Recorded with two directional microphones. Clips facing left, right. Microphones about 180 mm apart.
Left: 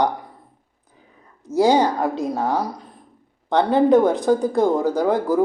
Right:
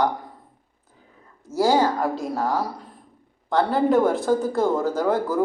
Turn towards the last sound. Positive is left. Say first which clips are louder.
# left 3 dB
turn(degrees=15)  # may be behind; listen again after turning